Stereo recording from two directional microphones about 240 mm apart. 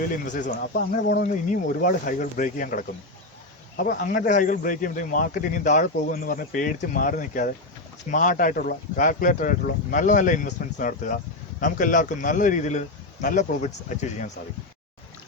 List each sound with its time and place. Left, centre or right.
0.1 s a man's voice: left